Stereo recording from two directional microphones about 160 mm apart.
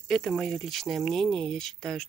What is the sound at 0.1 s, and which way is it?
Speech, centre (ahead or behind).